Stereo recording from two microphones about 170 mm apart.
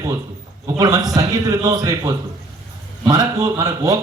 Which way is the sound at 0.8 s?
20° right (ahead or behind).